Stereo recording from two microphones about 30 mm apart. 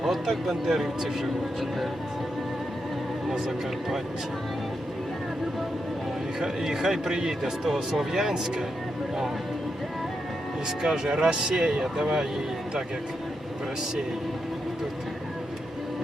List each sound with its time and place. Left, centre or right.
0.0 s speech: centre
6.4 s speech: centre
10.8 s speech: right